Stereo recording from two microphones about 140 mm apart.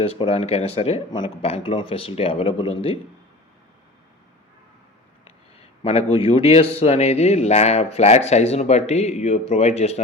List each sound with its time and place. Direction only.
0.0 s a man's voice: 45° left (ahead or behind)
5.5 s a man's voice: 45° left (ahead or behind)